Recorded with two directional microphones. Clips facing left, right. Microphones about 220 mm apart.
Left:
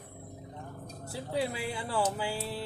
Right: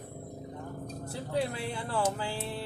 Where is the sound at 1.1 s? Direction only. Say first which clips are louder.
Even; 5° left (ahead or behind).